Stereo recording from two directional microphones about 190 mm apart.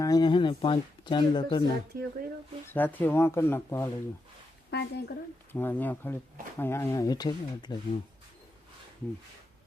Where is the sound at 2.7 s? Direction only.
10° left (ahead or behind).